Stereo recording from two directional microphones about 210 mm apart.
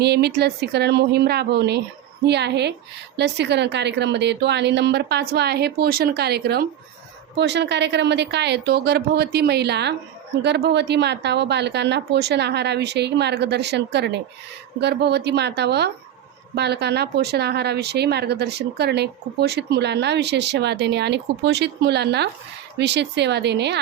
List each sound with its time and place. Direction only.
0.0 s speech: 50° right (ahead or behind)